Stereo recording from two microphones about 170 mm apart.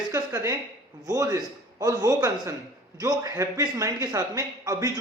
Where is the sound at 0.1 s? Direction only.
20° right (ahead or behind).